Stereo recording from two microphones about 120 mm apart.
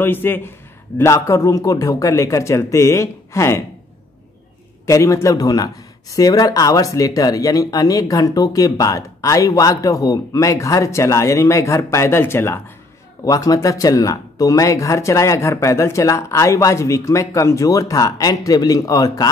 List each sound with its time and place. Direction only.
0.0 s a man's voice: 15° left (ahead or behind)
4.8 s speech: 25° left (ahead or behind)